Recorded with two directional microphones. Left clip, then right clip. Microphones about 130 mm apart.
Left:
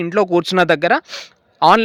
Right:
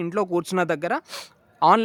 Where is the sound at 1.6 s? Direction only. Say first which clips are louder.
Left 6 dB; 20° left (ahead or behind).